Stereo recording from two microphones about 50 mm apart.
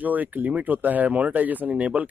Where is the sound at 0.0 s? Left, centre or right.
Right.